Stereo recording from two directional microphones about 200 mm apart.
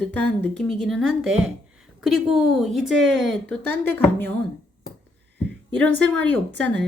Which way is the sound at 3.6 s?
55° right (ahead or behind).